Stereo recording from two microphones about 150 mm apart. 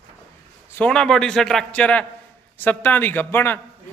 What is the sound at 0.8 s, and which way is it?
A man's voice, 5° left (ahead or behind).